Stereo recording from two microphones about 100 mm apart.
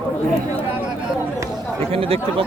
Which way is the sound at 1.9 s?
75° right (ahead or behind).